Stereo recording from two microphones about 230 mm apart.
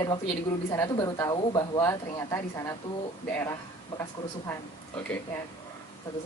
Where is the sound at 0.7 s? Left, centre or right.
Centre.